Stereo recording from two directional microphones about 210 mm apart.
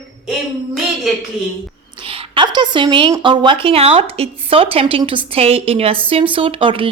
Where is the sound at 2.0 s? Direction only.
25° right (ahead or behind).